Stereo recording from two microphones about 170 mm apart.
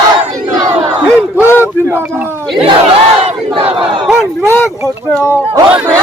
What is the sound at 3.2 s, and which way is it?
Battle cry, 35° right (ahead or behind).